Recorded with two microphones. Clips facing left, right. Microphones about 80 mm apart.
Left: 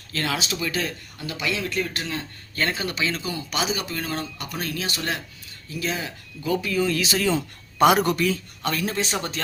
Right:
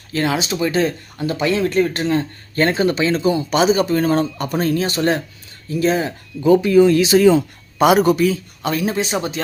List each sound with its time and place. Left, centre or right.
0.1 s speech: right
7.3 s speech: centre